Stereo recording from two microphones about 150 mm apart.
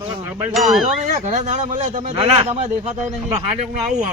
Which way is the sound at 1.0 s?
55° right (ahead or behind).